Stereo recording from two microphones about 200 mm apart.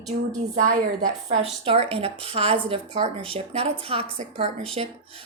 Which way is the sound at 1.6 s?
30° right (ahead or behind).